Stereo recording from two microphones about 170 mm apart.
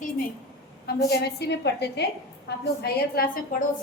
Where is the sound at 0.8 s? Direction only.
70° left (ahead or behind).